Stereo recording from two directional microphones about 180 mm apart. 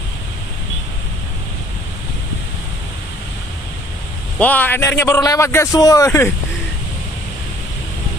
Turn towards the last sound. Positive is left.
turn(degrees=15)  # may be behind; listen again after turning